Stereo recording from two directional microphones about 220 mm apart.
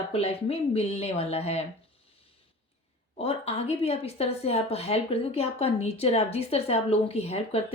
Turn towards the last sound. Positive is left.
turn(degrees=30)  # may be behind; listen again after turning